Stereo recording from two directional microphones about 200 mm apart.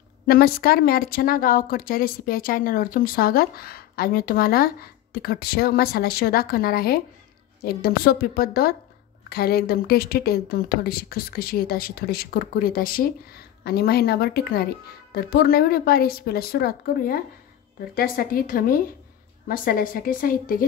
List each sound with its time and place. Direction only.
0.3 s speech: 50° left (ahead or behind)